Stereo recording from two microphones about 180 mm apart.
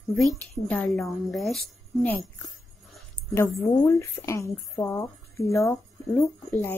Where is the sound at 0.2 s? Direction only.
5° left (ahead or behind).